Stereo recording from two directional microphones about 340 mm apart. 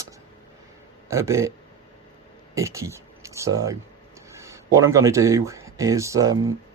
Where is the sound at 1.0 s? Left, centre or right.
Centre.